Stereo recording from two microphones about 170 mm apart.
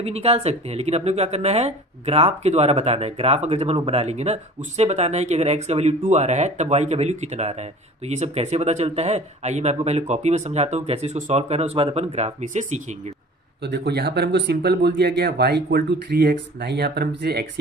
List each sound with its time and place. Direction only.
0.0 s speech: 35° right (ahead or behind)
13.6 s speech: 90° right